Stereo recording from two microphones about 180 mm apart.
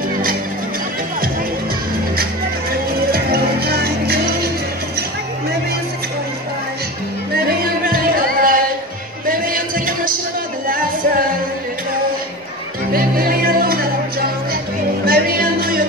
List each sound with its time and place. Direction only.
2.7 s music: 55° right (ahead or behind)
7.3 s music: 55° right (ahead or behind)
12.9 s music: 55° right (ahead or behind)
15.0 s music: 55° right (ahead or behind)